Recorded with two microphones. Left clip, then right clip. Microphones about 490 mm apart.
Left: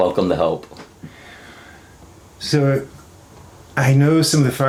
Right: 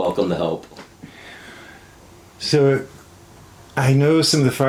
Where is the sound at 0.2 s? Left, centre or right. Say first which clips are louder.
Left 3 dB; left.